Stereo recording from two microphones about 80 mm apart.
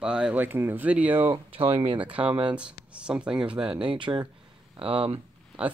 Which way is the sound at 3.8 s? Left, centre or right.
Right.